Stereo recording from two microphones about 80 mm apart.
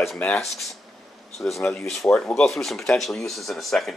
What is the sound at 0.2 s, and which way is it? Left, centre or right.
Speech, centre.